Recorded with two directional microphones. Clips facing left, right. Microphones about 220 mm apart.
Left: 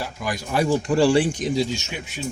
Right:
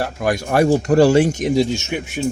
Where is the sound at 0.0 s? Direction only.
60° right (ahead or behind); by 1.3 s 45° right (ahead or behind).